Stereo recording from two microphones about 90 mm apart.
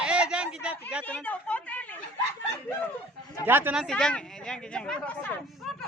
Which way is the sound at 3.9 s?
10° left (ahead or behind).